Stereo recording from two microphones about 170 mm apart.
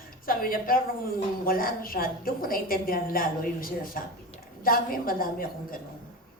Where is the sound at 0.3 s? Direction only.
55° left (ahead or behind).